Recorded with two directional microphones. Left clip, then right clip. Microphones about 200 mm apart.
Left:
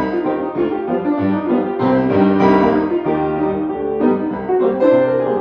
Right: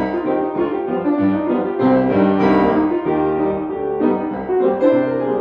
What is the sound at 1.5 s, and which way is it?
Music, 20° left (ahead or behind).